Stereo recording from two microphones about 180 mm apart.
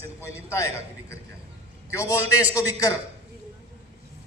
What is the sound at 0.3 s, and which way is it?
Speech, 15° left (ahead or behind).